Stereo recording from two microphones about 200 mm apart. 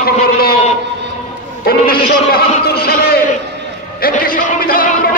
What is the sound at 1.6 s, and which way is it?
Speech, 50° left (ahead or behind).